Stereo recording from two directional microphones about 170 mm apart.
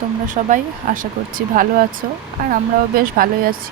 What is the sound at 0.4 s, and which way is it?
Speech, 45° right (ahead or behind).